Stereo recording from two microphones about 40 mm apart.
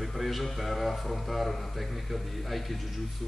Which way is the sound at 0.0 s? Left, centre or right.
Centre.